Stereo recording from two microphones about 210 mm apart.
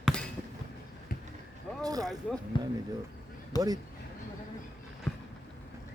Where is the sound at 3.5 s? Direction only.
20° left (ahead or behind).